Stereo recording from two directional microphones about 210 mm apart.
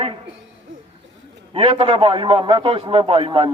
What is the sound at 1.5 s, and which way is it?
A man's voice, 25° right (ahead or behind).